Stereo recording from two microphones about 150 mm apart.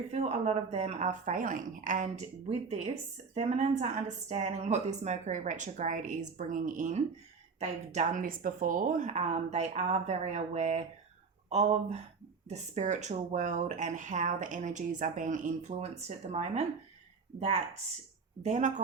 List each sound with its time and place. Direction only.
0.1 s speech: 45° right (ahead or behind)
18.4 s speech: 55° right (ahead or behind)